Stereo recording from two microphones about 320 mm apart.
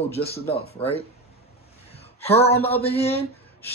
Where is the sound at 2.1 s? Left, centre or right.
Centre.